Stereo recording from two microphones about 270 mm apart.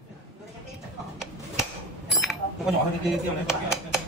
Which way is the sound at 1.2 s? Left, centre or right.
Centre.